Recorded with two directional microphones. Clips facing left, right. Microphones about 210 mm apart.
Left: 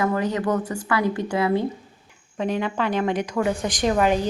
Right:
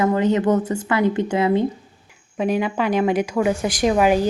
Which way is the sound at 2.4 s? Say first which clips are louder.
Right 4 dB; 10° right (ahead or behind).